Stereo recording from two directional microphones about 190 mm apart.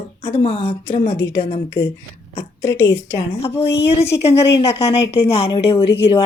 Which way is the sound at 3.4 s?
30° left (ahead or behind).